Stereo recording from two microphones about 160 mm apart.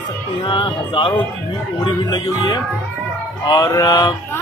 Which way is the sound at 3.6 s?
25° left (ahead or behind).